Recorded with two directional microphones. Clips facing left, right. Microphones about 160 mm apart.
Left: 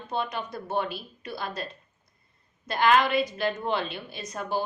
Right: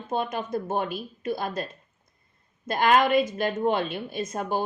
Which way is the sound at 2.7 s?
45° right (ahead or behind).